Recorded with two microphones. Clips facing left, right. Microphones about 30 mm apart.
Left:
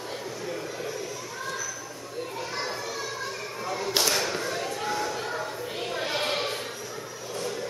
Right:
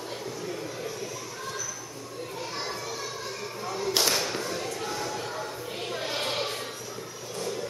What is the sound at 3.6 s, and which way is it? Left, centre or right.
Whip, centre.